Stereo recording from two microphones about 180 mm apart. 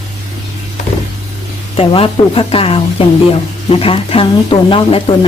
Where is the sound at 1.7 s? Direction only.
30° left (ahead or behind).